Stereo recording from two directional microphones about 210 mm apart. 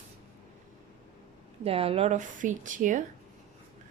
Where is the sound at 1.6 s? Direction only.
25° right (ahead or behind).